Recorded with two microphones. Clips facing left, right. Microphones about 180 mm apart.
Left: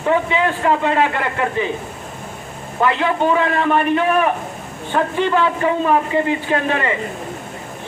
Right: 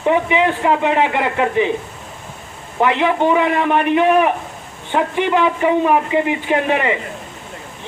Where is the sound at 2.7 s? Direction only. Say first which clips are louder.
Right 2 dB; 20° right (ahead or behind).